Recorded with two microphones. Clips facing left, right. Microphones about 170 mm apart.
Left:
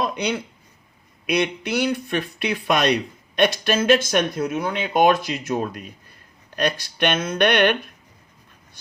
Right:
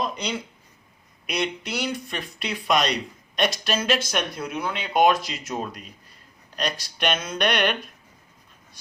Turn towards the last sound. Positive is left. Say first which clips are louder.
# left 5 dB
turn(degrees=60)  # may be behind; listen again after turning